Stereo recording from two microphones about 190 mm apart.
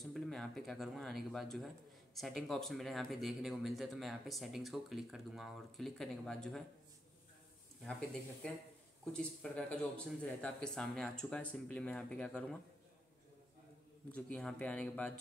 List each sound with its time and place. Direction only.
0.0 s speech: centre (ahead or behind)
7.8 s speech: 5° left (ahead or behind)
14.1 s speech: 5° left (ahead or behind)